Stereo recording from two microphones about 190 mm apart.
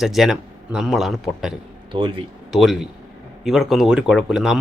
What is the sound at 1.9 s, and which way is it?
Speech, 25° right (ahead or behind).